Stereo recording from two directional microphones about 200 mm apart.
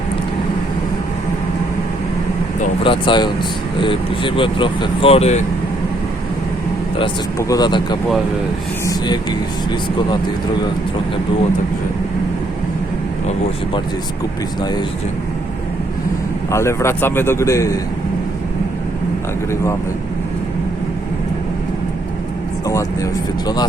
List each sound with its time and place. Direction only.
2.8 s speech: 25° left (ahead or behind)
7.0 s speech: 15° left (ahead or behind)
16.5 s a man's voice: 15° left (ahead or behind)
22.6 s speech: 15° left (ahead or behind)